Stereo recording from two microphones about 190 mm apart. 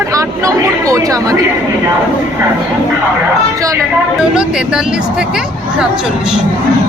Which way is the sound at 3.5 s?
15° right (ahead or behind).